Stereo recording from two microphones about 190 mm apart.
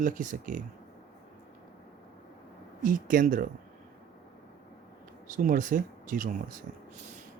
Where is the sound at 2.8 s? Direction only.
45° right (ahead or behind).